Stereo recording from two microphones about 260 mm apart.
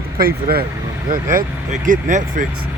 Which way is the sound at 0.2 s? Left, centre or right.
Right.